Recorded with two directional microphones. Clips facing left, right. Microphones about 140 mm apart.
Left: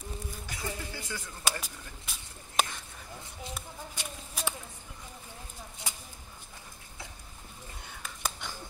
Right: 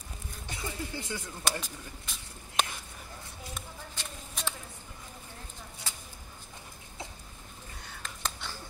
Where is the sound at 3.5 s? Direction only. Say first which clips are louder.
Even; 10° left (ahead or behind).